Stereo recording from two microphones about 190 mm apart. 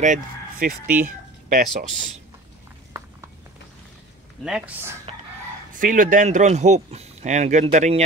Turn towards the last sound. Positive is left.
turn(degrees=-40)  # may be behind; listen again after turning